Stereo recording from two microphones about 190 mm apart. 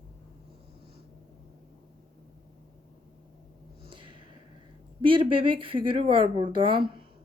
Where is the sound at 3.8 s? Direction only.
25° right (ahead or behind).